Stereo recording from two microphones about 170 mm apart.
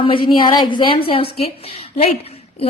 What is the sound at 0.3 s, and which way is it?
Speech, 25° left (ahead or behind).